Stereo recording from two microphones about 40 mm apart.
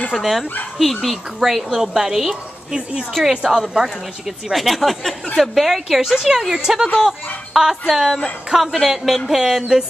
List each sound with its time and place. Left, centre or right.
0.1 s a woman's voice: centre
2.7 s speech: centre
4.5 s a woman's voice: centre